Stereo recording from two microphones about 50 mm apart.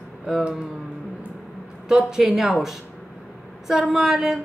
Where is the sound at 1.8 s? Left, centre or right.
Centre.